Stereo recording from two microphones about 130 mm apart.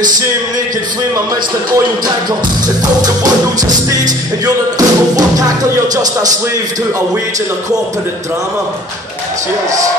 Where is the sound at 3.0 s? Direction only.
30° right (ahead or behind).